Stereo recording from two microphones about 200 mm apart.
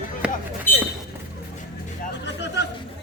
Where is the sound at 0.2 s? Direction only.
5° right (ahead or behind).